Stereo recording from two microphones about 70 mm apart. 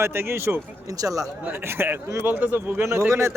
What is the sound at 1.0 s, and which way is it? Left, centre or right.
Speech, right.